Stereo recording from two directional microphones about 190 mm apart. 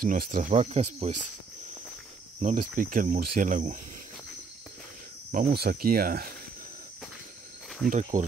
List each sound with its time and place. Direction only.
0.0 s speech: 50° right (ahead or behind)
2.4 s speech: 45° right (ahead or behind)
5.3 s speech: 50° right (ahead or behind)
8.1 s speech: 40° right (ahead or behind)